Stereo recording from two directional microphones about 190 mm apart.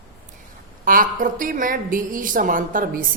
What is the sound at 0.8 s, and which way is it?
A woman's voice, 45° right (ahead or behind).